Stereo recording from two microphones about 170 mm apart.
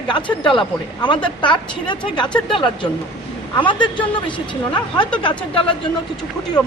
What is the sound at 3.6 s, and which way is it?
Speech, 30° left (ahead or behind).